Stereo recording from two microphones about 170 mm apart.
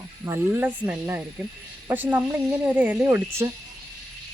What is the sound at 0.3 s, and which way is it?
Speech, 10° right (ahead or behind).